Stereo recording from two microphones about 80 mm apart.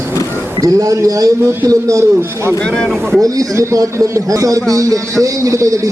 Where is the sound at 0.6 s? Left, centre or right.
Right.